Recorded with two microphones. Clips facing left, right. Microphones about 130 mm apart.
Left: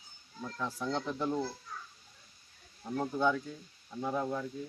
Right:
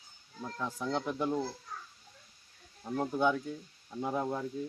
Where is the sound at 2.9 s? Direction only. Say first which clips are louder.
Right 1 dB; 5° right (ahead or behind).